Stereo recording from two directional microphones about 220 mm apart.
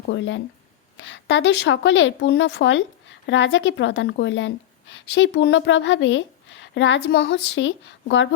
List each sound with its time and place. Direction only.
0.1 s a woman's voice: 55° left (ahead or behind)